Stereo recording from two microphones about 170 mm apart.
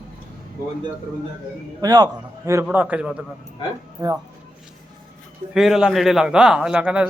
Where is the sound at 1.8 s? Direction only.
20° right (ahead or behind).